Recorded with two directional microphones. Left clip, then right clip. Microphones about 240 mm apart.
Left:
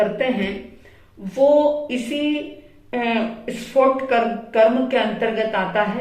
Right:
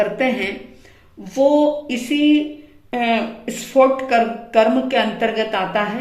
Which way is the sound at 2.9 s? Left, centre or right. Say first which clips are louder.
Right 3 dB; right.